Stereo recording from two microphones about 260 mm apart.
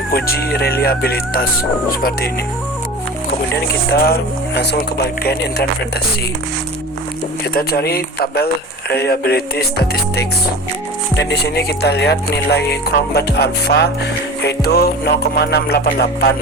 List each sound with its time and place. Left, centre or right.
0.1 s music: left
4.0 s music: left
7.5 s music: left